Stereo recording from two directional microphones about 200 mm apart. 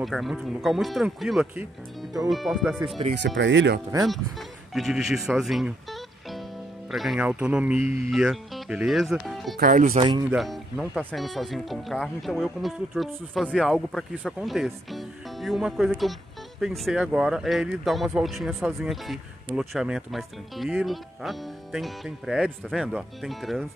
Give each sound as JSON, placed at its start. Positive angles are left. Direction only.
{"t": 0.0, "sound": "speech", "side_deg": 0}
{"t": 3.2, "sound": "speech", "side_deg": -65}
{"t": 4.0, "sound": "speech", "side_deg": 0}
{"t": 9.6, "sound": "speech", "side_deg": -45}
{"t": 10.3, "sound": "speech", "side_deg": 0}